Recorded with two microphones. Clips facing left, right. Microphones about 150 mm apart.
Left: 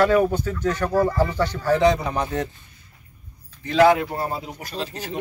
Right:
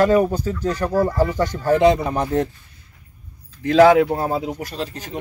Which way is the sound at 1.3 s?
45° right (ahead or behind).